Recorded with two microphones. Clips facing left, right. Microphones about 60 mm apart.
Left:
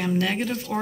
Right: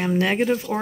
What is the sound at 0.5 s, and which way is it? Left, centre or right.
Speech, centre.